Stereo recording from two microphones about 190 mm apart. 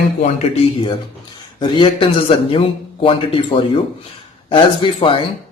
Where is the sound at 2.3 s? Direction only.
30° left (ahead or behind).